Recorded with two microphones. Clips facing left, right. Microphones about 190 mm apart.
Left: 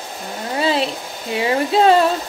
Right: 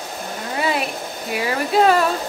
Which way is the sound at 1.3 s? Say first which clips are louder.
Left 2 dB; 25° left (ahead or behind).